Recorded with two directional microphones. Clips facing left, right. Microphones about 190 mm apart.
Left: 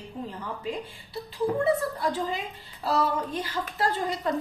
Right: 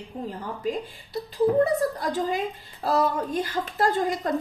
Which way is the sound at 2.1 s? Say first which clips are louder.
Right 4 dB; 45° right (ahead or behind).